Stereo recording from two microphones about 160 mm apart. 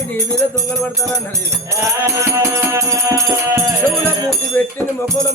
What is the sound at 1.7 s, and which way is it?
Music, 20° right (ahead or behind).